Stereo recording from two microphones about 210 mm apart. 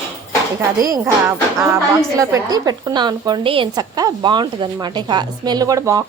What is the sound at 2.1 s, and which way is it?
A woman's voice, 15° right (ahead or behind).